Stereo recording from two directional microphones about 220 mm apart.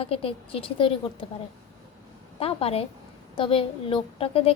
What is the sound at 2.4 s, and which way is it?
A woman's voice, 25° left (ahead or behind).